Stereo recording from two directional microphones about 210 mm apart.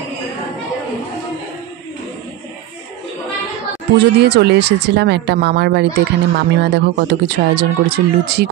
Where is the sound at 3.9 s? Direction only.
50° right (ahead or behind).